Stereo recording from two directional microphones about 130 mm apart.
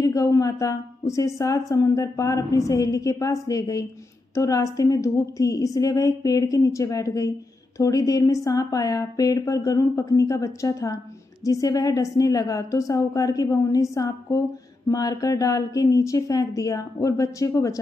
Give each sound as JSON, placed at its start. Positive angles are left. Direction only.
{"t": 0.0, "sound": "a woman's voice", "side_deg": 25}